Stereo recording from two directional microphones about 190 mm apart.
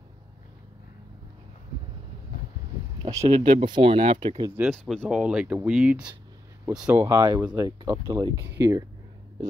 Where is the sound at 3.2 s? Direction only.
40° right (ahead or behind).